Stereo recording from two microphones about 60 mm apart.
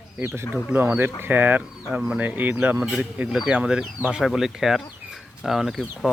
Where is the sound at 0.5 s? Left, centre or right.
Right.